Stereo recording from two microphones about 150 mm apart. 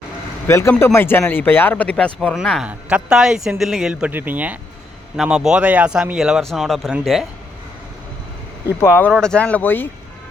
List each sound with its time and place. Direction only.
0.4 s speech: 15° left (ahead or behind); by 7.3 s centre (ahead or behind)
8.6 s speech: 15° left (ahead or behind)